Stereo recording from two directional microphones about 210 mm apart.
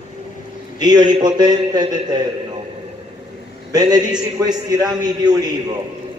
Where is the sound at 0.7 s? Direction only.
20° right (ahead or behind).